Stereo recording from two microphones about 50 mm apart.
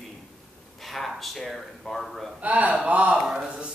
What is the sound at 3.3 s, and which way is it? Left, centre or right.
Speech, centre.